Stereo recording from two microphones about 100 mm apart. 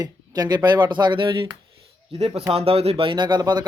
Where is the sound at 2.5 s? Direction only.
75° right (ahead or behind); by 3.6 s 45° right (ahead or behind).